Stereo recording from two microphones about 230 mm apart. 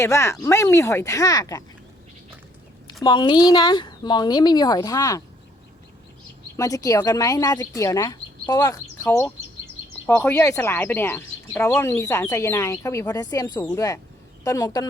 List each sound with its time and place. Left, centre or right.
0.0 s speech: centre
3.0 s a woman's voice: centre
6.6 s speech: centre